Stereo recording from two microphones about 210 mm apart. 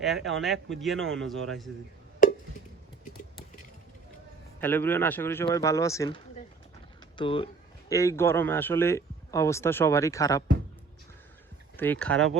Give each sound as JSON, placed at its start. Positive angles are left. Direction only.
{"t": 0.0, "sound": "speech", "side_deg": 0}
{"t": 3.0, "sound": "a sound", "side_deg": 40}
{"t": 4.6, "sound": "speech", "side_deg": 10}
{"t": 7.2, "sound": "a sound", "side_deg": 25}
{"t": 7.9, "sound": "speech", "side_deg": 15}
{"t": 11.8, "sound": "speech", "side_deg": 5}